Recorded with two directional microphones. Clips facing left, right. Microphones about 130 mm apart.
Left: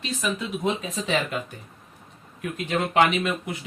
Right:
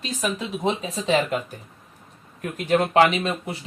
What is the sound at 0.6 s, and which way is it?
Speech, 30° right (ahead or behind).